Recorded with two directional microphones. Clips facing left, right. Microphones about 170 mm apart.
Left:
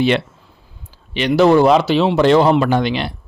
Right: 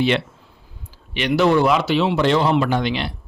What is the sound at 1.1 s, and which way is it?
A man's voice, 35° left (ahead or behind).